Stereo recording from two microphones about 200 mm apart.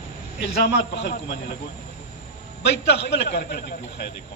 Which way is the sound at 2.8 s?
55° left (ahead or behind).